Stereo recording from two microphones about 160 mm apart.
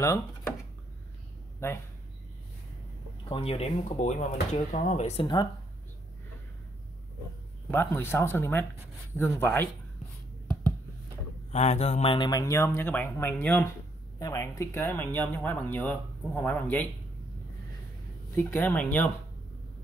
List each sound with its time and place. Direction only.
0.0 s a sound: 20° left (ahead or behind)
1.6 s speech: 15° left (ahead or behind)
3.3 s speech: 35° left (ahead or behind)
5.2 s speech: 25° left (ahead or behind)
7.7 s speech: 15° left (ahead or behind)
11.5 s speech: 45° left (ahead or behind); by 16.8 s 10° left (ahead or behind)
18.3 s speech: 10° left (ahead or behind)